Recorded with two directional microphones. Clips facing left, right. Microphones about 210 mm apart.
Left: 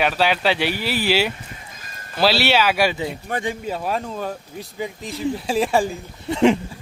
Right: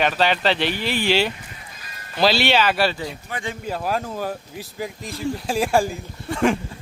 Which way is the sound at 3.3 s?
50° left (ahead or behind).